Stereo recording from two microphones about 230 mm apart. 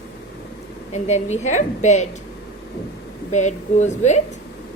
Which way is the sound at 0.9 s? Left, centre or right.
Left.